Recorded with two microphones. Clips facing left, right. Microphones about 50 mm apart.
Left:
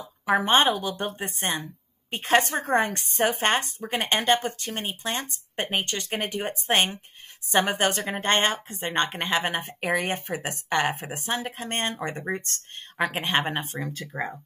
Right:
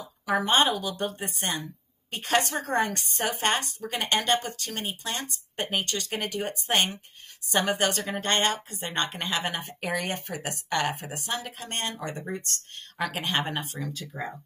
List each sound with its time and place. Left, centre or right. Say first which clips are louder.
0.3 s a woman's voice: left 3 dB; left